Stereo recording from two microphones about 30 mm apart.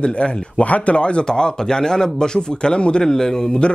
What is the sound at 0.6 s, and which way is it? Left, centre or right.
Speech, left.